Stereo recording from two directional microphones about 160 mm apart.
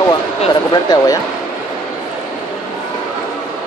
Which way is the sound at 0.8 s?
20° left (ahead or behind).